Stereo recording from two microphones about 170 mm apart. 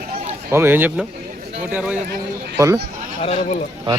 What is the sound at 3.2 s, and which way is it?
Speech, 40° left (ahead or behind).